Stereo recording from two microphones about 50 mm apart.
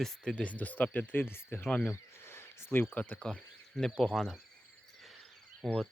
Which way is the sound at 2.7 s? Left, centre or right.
Left.